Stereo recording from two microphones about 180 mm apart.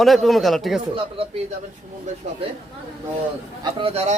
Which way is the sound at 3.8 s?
35° right (ahead or behind).